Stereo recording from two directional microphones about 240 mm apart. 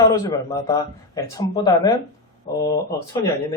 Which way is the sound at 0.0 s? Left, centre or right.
Centre.